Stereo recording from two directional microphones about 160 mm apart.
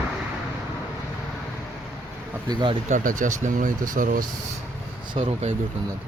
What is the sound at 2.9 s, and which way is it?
Speech, 50° right (ahead or behind).